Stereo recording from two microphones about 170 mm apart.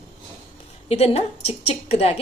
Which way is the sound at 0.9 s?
35° left (ahead or behind).